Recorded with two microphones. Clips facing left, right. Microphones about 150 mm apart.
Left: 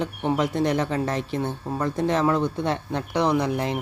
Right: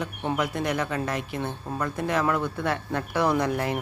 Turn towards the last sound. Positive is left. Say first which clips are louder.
# left 1 dB
turn(degrees=20)  # may be behind; listen again after turning